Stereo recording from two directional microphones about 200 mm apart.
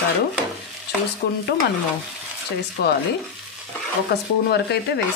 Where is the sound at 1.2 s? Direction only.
50° left (ahead or behind).